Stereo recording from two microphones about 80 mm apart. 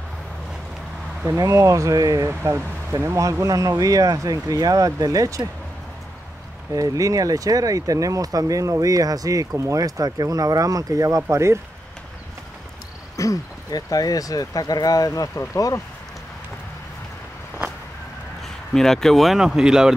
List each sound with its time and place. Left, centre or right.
1.4 s speech: right
6.7 s speech: right
13.1 s speech: left
18.7 s speech: centre